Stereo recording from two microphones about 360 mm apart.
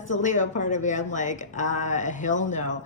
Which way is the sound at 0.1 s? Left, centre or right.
Centre.